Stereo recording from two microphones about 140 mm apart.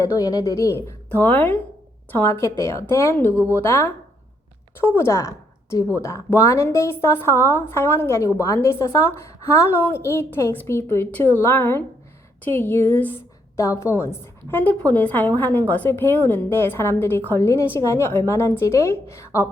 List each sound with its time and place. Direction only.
0.2 s a woman's voice: 25° left (ahead or behind)
4.9 s a woman's voice: 20° left (ahead or behind)